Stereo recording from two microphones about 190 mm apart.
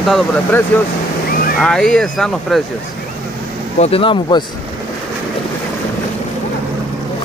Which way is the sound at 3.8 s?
30° left (ahead or behind).